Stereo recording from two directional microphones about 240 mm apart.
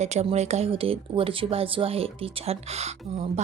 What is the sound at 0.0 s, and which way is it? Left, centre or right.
Speech, right.